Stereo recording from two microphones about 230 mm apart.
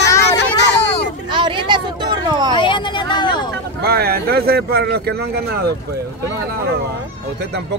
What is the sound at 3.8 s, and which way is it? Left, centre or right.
Speech, right.